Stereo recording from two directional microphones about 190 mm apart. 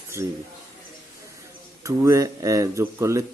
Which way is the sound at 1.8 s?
15° right (ahead or behind).